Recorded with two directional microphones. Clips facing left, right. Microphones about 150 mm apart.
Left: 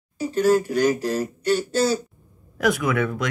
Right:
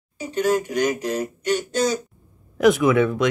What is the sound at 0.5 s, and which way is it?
Speech, 15° right (ahead or behind).